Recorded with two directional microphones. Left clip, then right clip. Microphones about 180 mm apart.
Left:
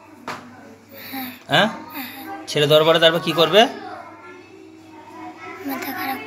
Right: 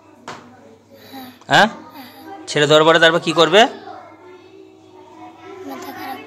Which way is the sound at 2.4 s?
20° right (ahead or behind).